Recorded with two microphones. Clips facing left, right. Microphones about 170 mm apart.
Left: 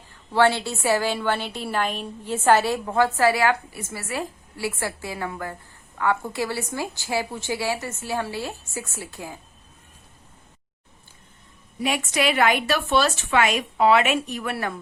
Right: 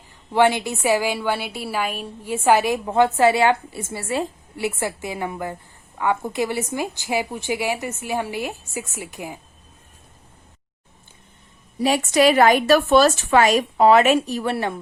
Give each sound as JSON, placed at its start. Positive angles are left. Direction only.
{"t": 0.3, "sound": "a woman's voice", "side_deg": -15}
{"t": 11.8, "sound": "a woman's voice", "side_deg": -35}